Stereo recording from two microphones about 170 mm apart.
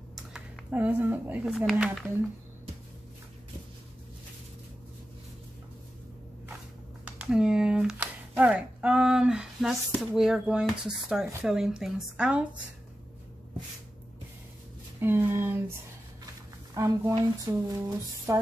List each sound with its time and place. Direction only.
0.1 s speech: 5° right (ahead or behind)
7.2 s a woman's voice: 5° right (ahead or behind)
15.0 s speech: 10° right (ahead or behind)
16.7 s speech: 20° right (ahead or behind)
17.1 s a sound: 20° right (ahead or behind)